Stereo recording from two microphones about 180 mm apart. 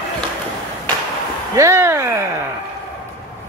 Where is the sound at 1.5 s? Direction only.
15° right (ahead or behind).